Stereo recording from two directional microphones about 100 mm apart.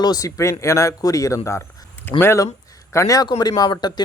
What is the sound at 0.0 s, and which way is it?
Speech, 40° left (ahead or behind).